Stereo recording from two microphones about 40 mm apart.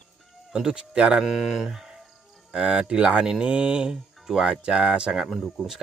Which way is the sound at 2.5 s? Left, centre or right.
Right.